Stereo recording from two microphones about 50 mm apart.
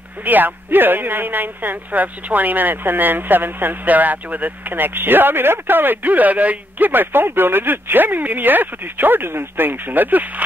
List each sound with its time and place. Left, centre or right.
0.2 s speech: right